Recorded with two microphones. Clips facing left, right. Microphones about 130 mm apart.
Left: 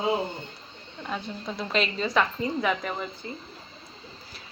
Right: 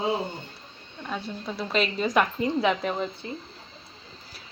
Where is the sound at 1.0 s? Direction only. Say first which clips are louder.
Even; centre (ahead or behind).